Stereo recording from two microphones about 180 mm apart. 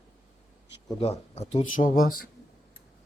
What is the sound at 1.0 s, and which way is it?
Speech, 35° left (ahead or behind).